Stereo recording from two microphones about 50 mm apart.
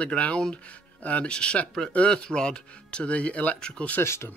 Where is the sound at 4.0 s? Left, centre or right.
Left.